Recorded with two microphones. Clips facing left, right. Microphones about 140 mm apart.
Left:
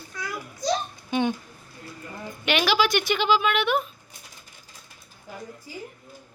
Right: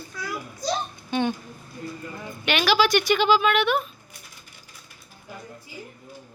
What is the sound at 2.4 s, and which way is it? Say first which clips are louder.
Speech: right 1 dB; 20° left (ahead or behind).